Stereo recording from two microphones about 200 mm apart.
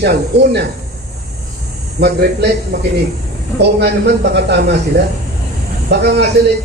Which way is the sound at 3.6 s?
55° right (ahead or behind).